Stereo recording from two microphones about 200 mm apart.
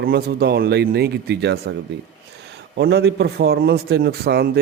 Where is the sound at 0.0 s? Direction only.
50° right (ahead or behind).